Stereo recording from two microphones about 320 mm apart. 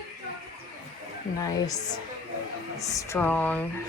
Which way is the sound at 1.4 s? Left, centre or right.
Centre.